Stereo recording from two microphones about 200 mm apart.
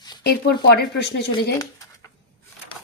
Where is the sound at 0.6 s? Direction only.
55° left (ahead or behind).